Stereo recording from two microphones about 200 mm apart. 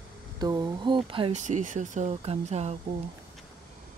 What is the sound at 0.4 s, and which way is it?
Speech, 20° right (ahead or behind).